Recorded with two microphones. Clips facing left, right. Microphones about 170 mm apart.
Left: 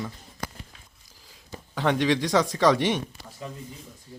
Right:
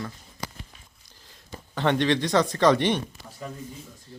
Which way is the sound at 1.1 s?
5° left (ahead or behind).